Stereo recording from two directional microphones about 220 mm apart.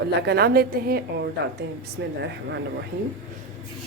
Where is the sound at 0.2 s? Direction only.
50° right (ahead or behind).